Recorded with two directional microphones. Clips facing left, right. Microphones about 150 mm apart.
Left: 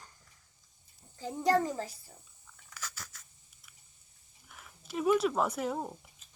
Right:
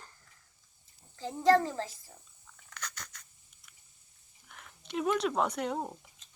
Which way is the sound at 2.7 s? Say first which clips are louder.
Right 1 dB; 5° left (ahead or behind).